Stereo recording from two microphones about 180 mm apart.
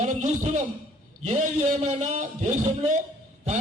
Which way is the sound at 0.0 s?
40° right (ahead or behind).